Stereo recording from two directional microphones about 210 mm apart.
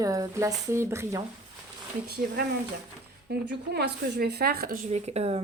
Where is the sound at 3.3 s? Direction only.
50° right (ahead or behind); by 5.4 s 30° right (ahead or behind).